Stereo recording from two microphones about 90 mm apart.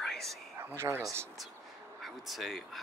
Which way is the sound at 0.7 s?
30° right (ahead or behind).